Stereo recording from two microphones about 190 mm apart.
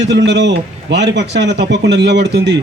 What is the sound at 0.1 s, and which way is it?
A man's voice, 70° right (ahead or behind).